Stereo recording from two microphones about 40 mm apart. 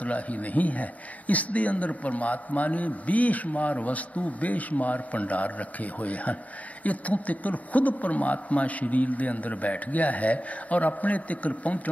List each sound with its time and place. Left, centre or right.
0.0 s a man's voice: left